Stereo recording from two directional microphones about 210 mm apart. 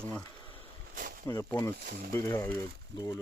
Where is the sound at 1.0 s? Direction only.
40° right (ahead or behind).